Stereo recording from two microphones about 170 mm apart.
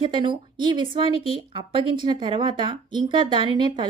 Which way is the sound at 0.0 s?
30° right (ahead or behind).